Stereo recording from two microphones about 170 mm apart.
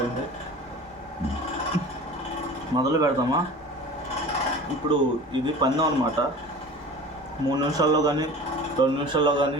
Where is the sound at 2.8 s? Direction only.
20° right (ahead or behind).